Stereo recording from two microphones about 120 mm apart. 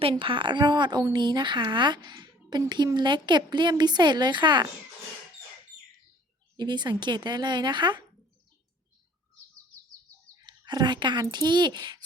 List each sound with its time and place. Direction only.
0.0 s speech: 45° right (ahead or behind)
6.6 s speech: 40° right (ahead or behind)
10.3 s speech: 35° right (ahead or behind)